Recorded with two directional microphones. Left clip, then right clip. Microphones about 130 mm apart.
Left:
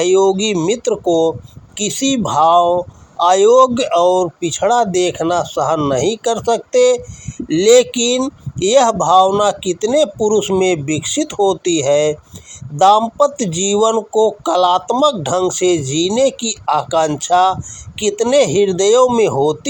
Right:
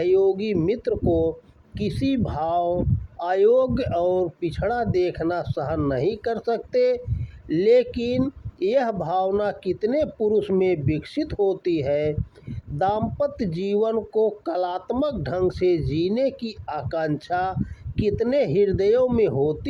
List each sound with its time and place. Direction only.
0.0 s speech: 15° left (ahead or behind)
1.8 s speech: 15° left (ahead or behind)
14.1 s speech: 50° left (ahead or behind)
14.4 s speech: 20° left (ahead or behind)